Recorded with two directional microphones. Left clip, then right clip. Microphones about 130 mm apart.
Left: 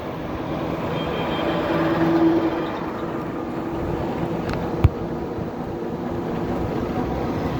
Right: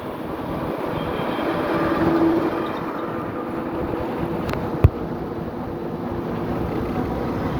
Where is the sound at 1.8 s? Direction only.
40° left (ahead or behind).